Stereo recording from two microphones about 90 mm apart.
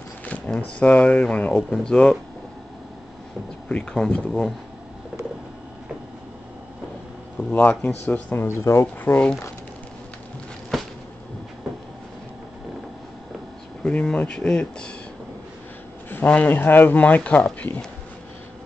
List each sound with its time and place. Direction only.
0.2 s speech: 15° left (ahead or behind)
3.6 s speech: 10° left (ahead or behind)
7.5 s speech: 20° left (ahead or behind)
8.8 s speech: 15° left (ahead or behind)
10.7 s a sound: 5° left (ahead or behind)
13.8 s speech: 15° left (ahead or behind)
16.1 s speech: 15° left (ahead or behind)